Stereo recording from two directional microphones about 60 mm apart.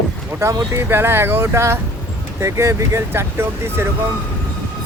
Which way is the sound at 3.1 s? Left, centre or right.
Right.